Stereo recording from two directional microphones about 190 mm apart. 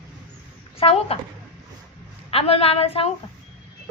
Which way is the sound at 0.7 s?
30° left (ahead or behind).